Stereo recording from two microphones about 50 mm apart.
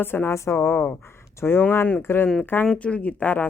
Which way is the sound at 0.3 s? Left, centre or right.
Left.